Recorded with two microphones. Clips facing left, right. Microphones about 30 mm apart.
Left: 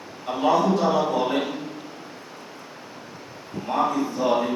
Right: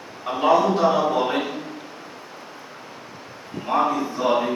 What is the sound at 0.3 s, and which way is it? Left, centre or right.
A man's voice, centre.